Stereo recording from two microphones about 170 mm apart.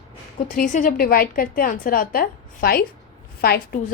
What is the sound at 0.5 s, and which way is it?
A woman's voice, 55° left (ahead or behind).